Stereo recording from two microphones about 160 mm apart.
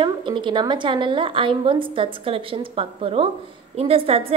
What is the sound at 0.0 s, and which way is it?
A woman's voice, 30° right (ahead or behind).